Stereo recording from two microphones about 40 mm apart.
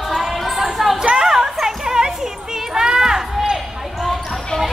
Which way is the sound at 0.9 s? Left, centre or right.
Centre.